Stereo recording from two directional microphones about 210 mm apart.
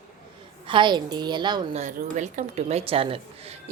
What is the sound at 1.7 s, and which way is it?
A woman's voice, 35° right (ahead or behind).